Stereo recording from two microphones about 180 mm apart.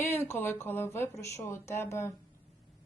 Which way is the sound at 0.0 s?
15° left (ahead or behind).